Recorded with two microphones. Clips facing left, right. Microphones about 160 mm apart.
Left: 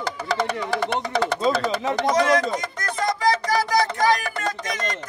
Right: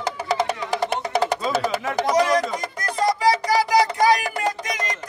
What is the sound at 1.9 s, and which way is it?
Speech, 10° right (ahead or behind).